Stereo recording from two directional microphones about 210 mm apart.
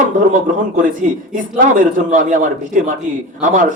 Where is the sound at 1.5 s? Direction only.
40° right (ahead or behind).